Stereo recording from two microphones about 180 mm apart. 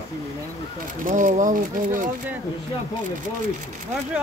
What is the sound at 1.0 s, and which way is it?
Speech, 45° right (ahead or behind).